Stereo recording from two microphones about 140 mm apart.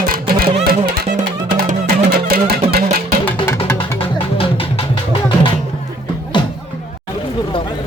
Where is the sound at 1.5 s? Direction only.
80° right.